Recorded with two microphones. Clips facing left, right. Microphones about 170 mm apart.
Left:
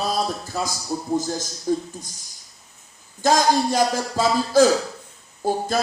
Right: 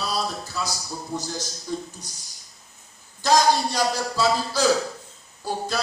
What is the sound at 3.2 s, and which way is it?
Music, 50° left (ahead or behind).